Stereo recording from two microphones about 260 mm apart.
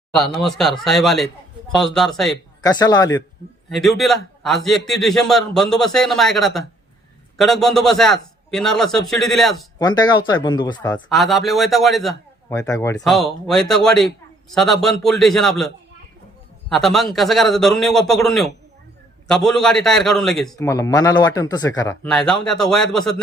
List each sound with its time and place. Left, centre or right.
0.1 s a man's voice: centre
2.6 s speech: centre
3.7 s a man's voice: centre
9.7 s speech: centre
11.1 s a man's voice: centre
12.5 s speech: centre
13.1 s a man's voice: centre
22.0 s a man's voice: centre